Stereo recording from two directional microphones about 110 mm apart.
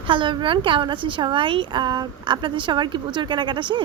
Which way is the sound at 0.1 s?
50° right (ahead or behind).